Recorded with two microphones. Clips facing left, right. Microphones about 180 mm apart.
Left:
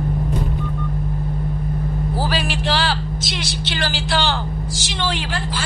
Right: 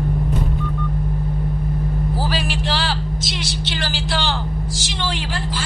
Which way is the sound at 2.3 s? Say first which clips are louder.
Left 1 dB; 65° left (ahead or behind).